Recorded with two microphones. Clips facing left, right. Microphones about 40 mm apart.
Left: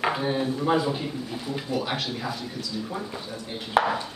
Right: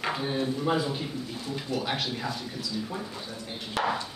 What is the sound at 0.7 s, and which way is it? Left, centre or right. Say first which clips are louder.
Speech: left 4 dB; centre.